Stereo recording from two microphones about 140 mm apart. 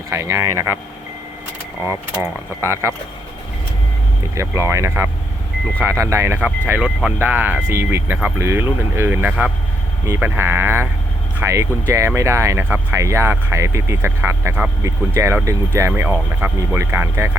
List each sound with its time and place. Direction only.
0.1 s speech: 20° right (ahead or behind)
1.8 s speech: 15° right (ahead or behind)
4.2 s speech: 20° right (ahead or behind)